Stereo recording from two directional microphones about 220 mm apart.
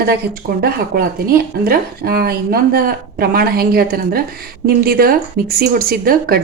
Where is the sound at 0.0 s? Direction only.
45° right (ahead or behind).